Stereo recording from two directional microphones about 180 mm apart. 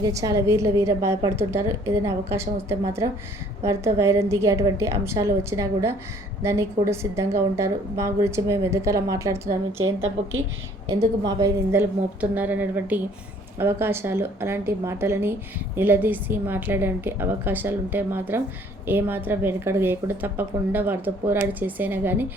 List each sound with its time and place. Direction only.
0.0 s a woman's voice: 20° right (ahead or behind)
10.8 s a woman's voice: 20° right (ahead or behind)